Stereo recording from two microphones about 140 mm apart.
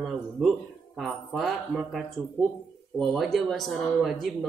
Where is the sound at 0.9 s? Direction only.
Centre (ahead or behind).